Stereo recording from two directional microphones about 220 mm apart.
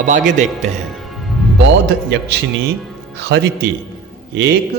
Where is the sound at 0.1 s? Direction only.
35° right (ahead or behind).